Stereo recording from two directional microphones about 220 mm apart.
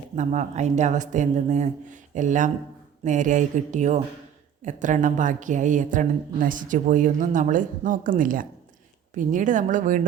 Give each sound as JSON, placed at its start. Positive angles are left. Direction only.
{"t": 0.2, "sound": "a woman's voice", "side_deg": -30}